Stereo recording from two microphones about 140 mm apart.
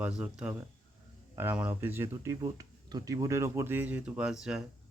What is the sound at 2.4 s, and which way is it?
Speech, 30° right (ahead or behind).